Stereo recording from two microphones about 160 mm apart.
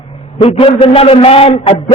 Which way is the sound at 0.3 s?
35° left (ahead or behind).